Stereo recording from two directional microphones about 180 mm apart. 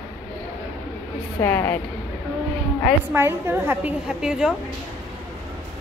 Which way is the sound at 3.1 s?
15° right (ahead or behind).